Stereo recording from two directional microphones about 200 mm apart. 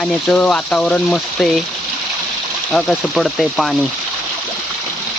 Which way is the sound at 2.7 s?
5° left (ahead or behind).